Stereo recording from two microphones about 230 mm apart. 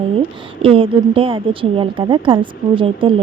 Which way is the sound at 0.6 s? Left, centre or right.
Right.